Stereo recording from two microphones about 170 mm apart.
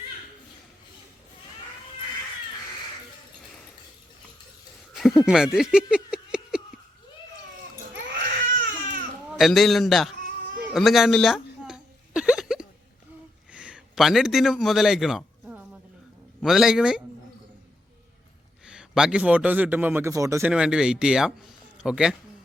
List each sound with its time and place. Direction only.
5.2 s speech: 5° right (ahead or behind)
8.4 s baby cry: 50° right (ahead or behind)
9.3 s a man's voice: centre (ahead or behind)
10.8 s a sound: centre (ahead or behind)
16.4 s a man's voice: centre (ahead or behind)
18.6 s a man's voice: 5° right (ahead or behind)
20.5 s a man's voice: 5° right (ahead or behind)